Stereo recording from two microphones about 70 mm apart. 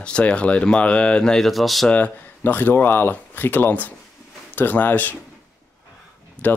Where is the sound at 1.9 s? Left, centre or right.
Left.